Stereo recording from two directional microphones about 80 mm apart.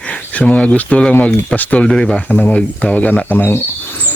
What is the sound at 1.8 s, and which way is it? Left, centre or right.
Speech, centre.